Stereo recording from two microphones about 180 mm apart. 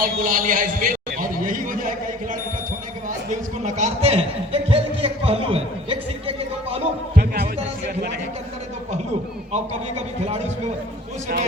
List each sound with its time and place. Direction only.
0.0 s a man's voice: 50° right (ahead or behind); by 6.8 s 30° right (ahead or behind)
7.2 s music: 60° right (ahead or behind)